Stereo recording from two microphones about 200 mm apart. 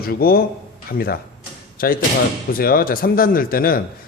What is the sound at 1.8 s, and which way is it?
A man's voice, 50° left (ahead or behind).